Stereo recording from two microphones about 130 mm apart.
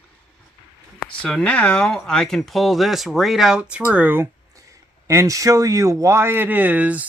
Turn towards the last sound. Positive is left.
turn(degrees=-10)  # may be behind; listen again after turning